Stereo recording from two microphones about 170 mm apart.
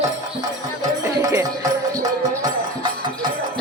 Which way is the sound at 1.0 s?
20° right (ahead or behind).